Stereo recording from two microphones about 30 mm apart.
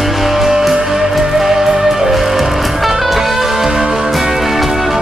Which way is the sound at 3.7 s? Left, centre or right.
Right.